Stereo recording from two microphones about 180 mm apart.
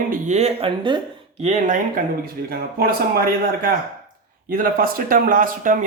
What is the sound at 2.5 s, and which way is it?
A man's voice, 55° right (ahead or behind).